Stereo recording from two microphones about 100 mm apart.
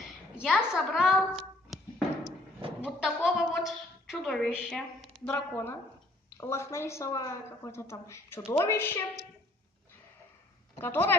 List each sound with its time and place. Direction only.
0.4 s a woman's voice: 5° right (ahead or behind)
5.2 s a woman's voice: 20° left (ahead or behind)
10.8 s a woman's voice: 20° left (ahead or behind)